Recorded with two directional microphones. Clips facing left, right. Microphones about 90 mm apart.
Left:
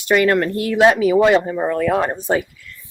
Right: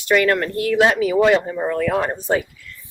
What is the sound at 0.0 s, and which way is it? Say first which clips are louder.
Speech: left 2 dB; 20° left (ahead or behind).